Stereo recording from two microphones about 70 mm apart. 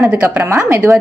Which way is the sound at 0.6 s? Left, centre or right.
Right.